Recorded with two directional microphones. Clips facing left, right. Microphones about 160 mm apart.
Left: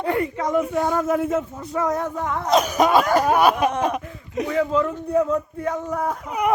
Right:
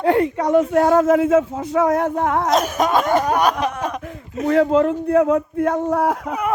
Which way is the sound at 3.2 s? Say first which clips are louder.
Left 1 dB; 5° left (ahead or behind).